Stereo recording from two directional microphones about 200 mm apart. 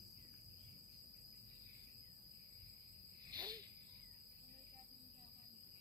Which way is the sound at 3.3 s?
20° right (ahead or behind).